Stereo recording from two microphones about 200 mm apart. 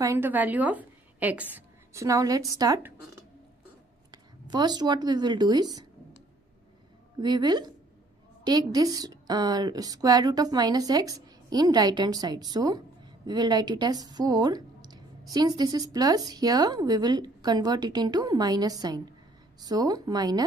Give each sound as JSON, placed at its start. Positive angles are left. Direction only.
{"t": 0.0, "sound": "a woman's voice", "side_deg": -10}
{"t": 4.1, "sound": "speech", "side_deg": -20}
{"t": 7.2, "sound": "a woman's voice", "side_deg": -20}